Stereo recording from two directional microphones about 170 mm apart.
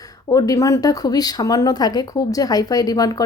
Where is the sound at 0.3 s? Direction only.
20° left (ahead or behind).